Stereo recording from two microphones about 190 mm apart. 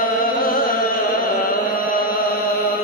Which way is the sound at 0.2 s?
45° left (ahead or behind).